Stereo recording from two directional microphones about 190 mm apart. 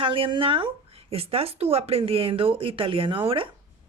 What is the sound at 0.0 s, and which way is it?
Speech, 25° right (ahead or behind).